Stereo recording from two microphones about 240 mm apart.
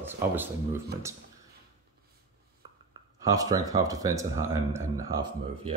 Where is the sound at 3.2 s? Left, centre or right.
Centre.